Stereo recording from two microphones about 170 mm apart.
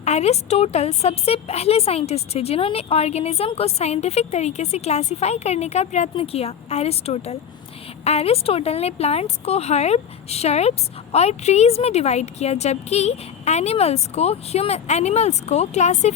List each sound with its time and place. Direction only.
0.0 s speech: 40° left (ahead or behind)